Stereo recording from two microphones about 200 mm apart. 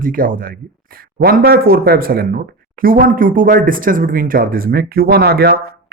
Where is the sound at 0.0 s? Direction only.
45° right (ahead or behind).